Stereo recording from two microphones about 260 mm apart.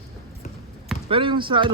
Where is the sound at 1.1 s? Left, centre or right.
Centre.